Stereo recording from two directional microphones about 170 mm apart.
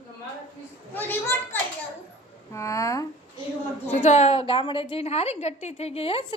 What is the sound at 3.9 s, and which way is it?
A woman's voice, 40° left (ahead or behind).